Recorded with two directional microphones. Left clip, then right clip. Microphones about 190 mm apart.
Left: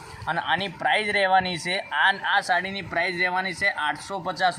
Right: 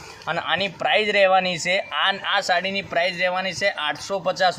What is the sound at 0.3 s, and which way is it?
Speech, 45° right (ahead or behind).